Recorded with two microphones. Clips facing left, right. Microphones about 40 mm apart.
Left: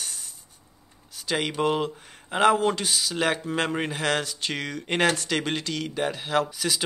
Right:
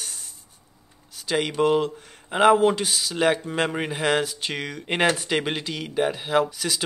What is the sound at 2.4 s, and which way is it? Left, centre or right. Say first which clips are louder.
Speech: right 4 dB; centre.